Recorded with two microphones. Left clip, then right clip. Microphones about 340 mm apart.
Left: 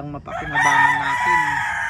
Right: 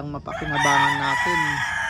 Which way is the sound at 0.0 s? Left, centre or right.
Centre.